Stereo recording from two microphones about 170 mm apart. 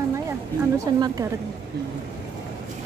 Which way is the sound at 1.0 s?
20° right (ahead or behind).